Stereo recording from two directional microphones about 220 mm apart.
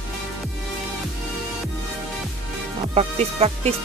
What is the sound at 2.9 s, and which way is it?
Speech, 30° right (ahead or behind).